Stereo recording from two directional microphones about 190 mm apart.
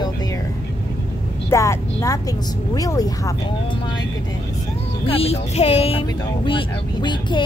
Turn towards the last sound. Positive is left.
turn(degrees=25)  # may be behind; listen again after turning